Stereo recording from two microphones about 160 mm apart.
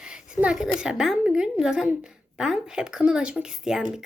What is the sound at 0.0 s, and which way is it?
Speech, 5° right (ahead or behind).